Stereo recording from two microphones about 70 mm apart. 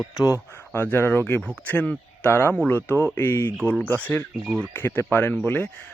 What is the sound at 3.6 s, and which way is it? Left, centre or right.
A man's voice, left.